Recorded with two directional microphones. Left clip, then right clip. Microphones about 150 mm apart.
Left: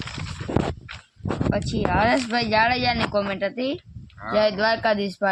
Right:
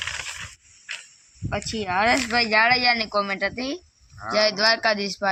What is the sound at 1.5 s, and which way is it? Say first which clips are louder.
Speech: left 1 dB; 90° left.